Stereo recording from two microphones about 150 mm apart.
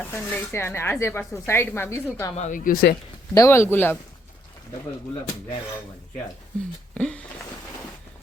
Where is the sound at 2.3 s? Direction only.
55° left (ahead or behind).